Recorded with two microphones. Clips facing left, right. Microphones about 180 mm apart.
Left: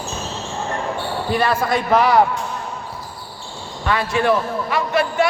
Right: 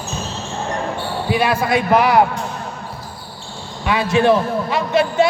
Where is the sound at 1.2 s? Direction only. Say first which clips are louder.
Right 1 dB; 10° right (ahead or behind).